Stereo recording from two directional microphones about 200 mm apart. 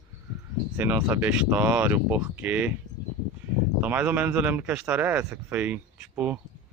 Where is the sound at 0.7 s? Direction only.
10° right (ahead or behind).